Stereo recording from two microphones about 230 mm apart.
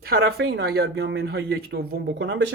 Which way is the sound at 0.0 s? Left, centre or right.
Right.